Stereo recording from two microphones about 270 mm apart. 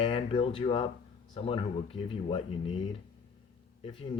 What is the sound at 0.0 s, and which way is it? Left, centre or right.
Speech, centre.